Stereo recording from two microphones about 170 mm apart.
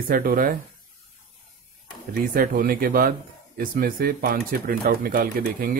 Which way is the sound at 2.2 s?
55° right (ahead or behind).